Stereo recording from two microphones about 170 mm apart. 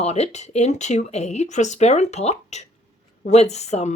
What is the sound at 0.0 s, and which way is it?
Speech, 40° left (ahead or behind).